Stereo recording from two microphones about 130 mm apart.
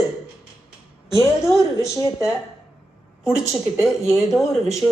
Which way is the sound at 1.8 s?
25° left (ahead or behind).